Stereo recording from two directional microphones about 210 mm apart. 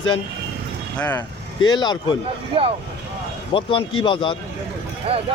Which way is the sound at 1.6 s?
20° left (ahead or behind).